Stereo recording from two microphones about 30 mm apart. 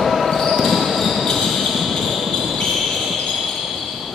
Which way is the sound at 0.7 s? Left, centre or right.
Centre.